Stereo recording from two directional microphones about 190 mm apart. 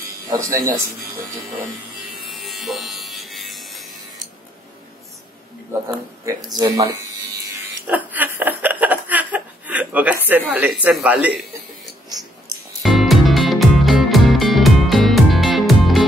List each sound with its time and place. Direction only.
0.3 s speech: 20° right (ahead or behind)
2.2 s music: centre (ahead or behind)
5.7 s speech: 20° right (ahead or behind)
7.8 s chuckle: 10° right (ahead or behind)
10.5 s speech: 10° right (ahead or behind)
12.8 s music: centre (ahead or behind)